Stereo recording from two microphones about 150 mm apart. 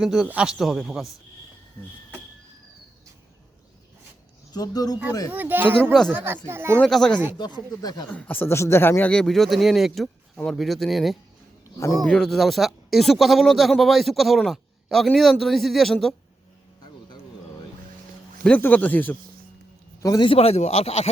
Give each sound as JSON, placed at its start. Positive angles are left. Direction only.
{"t": 0.0, "sound": "speech", "side_deg": -5}
{"t": 4.5, "sound": "speech", "side_deg": 25}
{"t": 5.3, "sound": "speech", "side_deg": -10}
{"t": 5.8, "sound": "speech", "side_deg": 5}
{"t": 6.1, "sound": "speech", "side_deg": -15}
{"t": 6.7, "sound": "speech", "side_deg": 5}
{"t": 7.3, "sound": "speech", "side_deg": 30}
{"t": 8.1, "sound": "speech", "side_deg": 10}
{"t": 18.4, "sound": "speech", "side_deg": 10}
{"t": 20.0, "sound": "a man's voice", "side_deg": 25}